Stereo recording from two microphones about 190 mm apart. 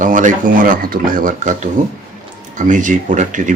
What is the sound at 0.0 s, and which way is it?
Speech, 40° right (ahead or behind).